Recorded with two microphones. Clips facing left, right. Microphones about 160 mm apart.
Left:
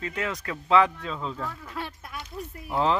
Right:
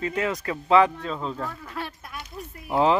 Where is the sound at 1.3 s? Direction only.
5° right (ahead or behind).